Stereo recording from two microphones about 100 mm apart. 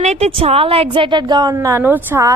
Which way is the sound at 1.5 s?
30° right (ahead or behind).